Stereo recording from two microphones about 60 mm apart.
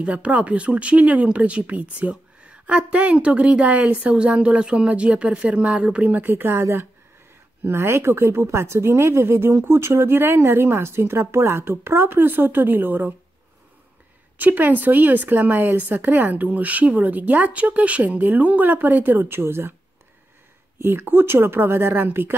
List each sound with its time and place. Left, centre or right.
0.0 s speech: centre; by 6.6 s right
7.6 s speech: right
14.4 s speech: right
20.8 s speech: right